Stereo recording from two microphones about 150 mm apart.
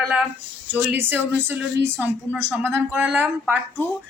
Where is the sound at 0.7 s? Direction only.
15° right (ahead or behind).